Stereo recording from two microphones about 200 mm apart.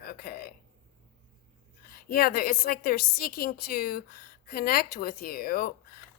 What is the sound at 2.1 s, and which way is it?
A woman's voice, 50° left (ahead or behind).